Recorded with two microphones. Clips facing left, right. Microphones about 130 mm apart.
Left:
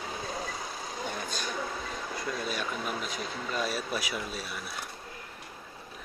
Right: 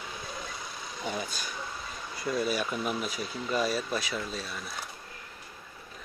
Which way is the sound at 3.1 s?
50° left (ahead or behind).